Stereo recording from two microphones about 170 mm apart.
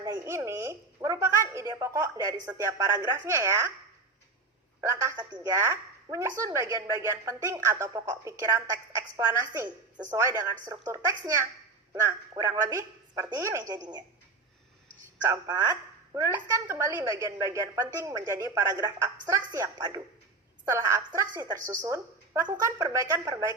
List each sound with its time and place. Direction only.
0.0 s a woman's voice: 20° right (ahead or behind)
4.8 s a woman's voice: 15° right (ahead or behind)
13.7 s speech: 25° right (ahead or behind)
15.3 s a woman's voice: 15° right (ahead or behind)